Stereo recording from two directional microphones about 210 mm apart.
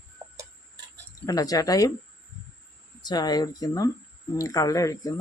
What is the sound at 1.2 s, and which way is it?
Speech, 15° left (ahead or behind).